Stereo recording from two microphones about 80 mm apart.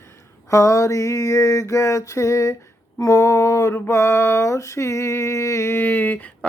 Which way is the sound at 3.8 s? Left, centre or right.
Left.